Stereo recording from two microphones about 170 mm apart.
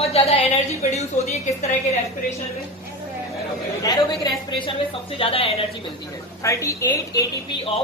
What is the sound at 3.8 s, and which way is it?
A woman's voice, 20° left (ahead or behind).